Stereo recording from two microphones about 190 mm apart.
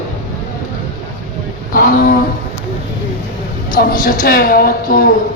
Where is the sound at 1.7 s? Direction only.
50° left (ahead or behind).